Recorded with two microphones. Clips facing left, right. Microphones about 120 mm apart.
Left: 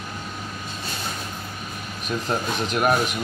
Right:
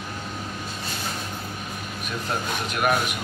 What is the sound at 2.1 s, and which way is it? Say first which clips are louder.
Speech: left 4 dB; 35° left (ahead or behind).